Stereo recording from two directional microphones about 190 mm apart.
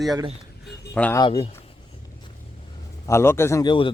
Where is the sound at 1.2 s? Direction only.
25° left (ahead or behind).